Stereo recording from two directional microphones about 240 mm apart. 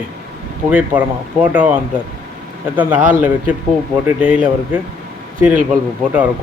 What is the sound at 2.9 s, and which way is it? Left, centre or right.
Speech, right.